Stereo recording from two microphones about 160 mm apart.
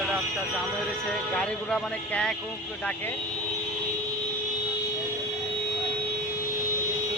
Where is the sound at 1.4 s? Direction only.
5° left (ahead or behind).